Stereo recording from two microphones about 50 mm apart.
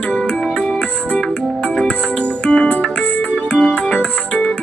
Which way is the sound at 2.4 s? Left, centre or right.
Left.